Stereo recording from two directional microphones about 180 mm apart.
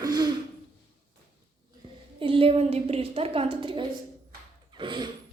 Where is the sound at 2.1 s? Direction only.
30° right (ahead or behind).